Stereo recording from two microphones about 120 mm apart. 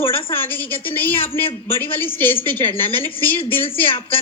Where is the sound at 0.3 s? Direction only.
15° left (ahead or behind).